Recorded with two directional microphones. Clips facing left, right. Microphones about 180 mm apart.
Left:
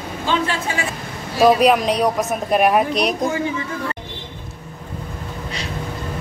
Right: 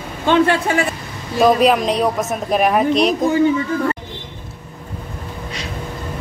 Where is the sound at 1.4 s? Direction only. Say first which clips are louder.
Even; centre (ahead or behind).